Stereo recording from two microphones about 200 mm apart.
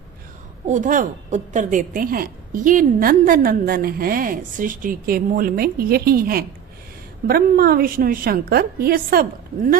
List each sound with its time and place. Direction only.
0.7 s a woman's voice: 40° right (ahead or behind)